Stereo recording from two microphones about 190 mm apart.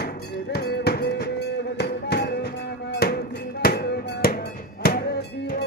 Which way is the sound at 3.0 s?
55° left (ahead or behind).